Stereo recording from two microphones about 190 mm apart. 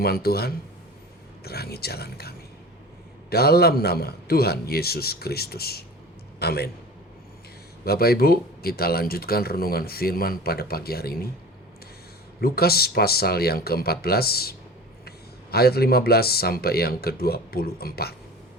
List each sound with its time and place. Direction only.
0.0 s a man's voice: 55° left (ahead or behind)
7.9 s speech: 55° left (ahead or behind)
12.4 s speech: 55° left (ahead or behind)
15.5 s speech: 55° left (ahead or behind)